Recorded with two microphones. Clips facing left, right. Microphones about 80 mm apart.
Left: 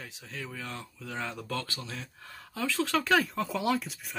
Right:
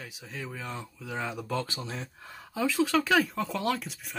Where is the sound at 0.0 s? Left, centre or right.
Centre.